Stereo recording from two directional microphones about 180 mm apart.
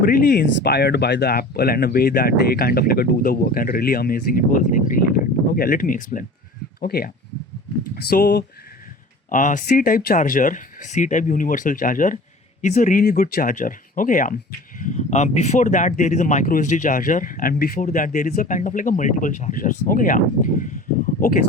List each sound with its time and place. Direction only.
0.0 s speech: 55° left (ahead or behind)
9.3 s speech: 45° left (ahead or behind)